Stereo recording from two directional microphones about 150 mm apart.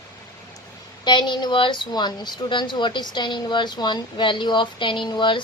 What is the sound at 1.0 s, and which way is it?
A woman's voice, 30° left (ahead or behind).